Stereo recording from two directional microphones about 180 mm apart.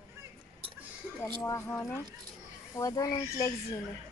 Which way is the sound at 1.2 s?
10° left (ahead or behind).